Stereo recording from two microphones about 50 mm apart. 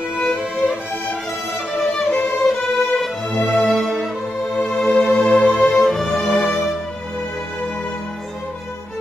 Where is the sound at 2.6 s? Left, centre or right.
Centre.